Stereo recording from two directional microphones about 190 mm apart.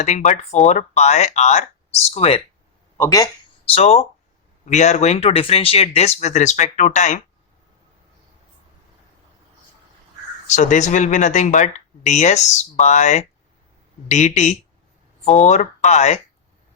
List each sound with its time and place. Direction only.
0.0 s speech: 40° left (ahead or behind)
3.0 s speech: 15° left (ahead or behind)
3.8 s speech: 35° left (ahead or behind)
10.4 s speech: 40° left (ahead or behind)